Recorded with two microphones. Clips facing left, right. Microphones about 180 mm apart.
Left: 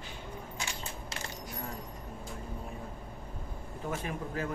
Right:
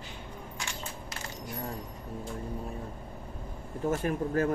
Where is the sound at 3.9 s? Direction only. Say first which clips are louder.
Right 8 dB; 45° right (ahead or behind).